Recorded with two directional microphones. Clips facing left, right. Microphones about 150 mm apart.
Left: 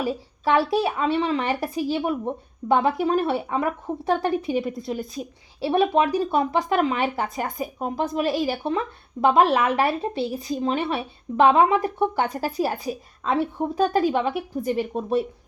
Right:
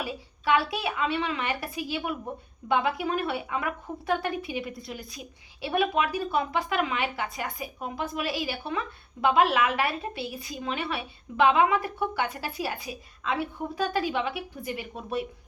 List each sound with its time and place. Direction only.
0.0 s a woman's voice: 40° left (ahead or behind)